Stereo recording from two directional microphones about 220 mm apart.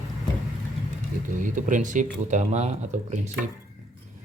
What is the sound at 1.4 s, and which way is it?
Speech, 35° right (ahead or behind).